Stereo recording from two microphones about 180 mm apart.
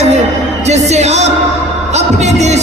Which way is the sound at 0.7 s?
40° right (ahead or behind).